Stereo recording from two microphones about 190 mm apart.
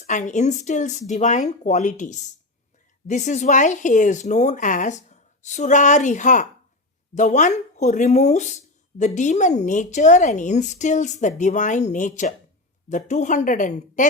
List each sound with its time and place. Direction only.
0.0 s speech: 40° left (ahead or behind)